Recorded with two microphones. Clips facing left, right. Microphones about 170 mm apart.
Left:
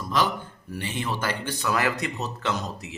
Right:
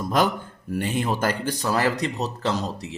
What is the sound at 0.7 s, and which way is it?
Speech, 50° right (ahead or behind).